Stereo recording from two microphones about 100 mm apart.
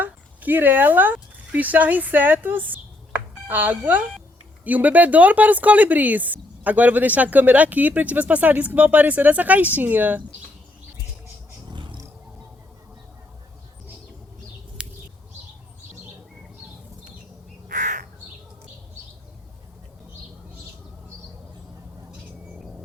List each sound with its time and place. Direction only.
0.0 s speech: 20° right (ahead or behind)
11.7 s roaring cats: 50° right (ahead or behind)
14.8 s a sound: 10° right (ahead or behind)